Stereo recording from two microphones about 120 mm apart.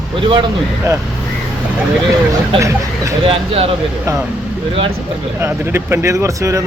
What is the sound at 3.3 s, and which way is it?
Speech, 55° right (ahead or behind).